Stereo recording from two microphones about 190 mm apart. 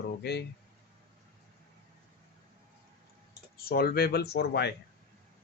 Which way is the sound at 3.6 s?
55° left (ahead or behind).